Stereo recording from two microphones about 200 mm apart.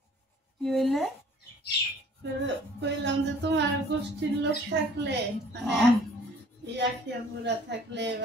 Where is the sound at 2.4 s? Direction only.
60° right (ahead or behind).